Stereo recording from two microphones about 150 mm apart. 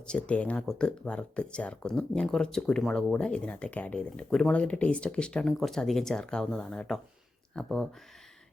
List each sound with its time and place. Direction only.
0.0 s speech: 5° left (ahead or behind)